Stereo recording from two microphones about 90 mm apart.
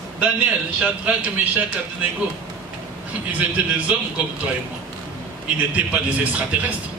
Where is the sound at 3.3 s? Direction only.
15° right (ahead or behind).